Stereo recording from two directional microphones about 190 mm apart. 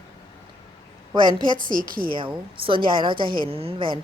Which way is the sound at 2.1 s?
25° right (ahead or behind).